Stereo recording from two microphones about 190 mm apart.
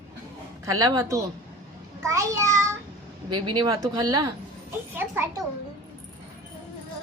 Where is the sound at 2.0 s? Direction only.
15° right (ahead or behind).